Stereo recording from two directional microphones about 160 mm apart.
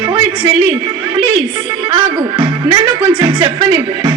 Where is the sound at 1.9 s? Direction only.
30° right (ahead or behind).